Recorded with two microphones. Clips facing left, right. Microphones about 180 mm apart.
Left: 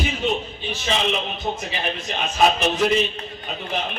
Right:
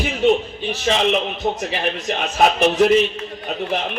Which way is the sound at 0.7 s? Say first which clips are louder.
Right 5 dB; 65° right (ahead or behind).